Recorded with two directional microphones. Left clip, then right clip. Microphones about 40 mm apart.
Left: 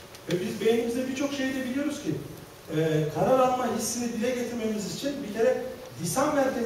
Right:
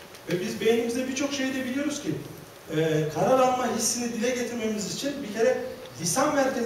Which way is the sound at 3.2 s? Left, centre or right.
Centre.